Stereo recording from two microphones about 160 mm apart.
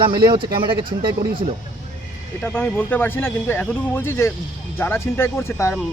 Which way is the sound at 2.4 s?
15° left (ahead or behind).